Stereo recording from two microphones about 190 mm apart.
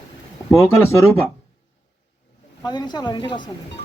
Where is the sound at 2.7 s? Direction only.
20° left (ahead or behind).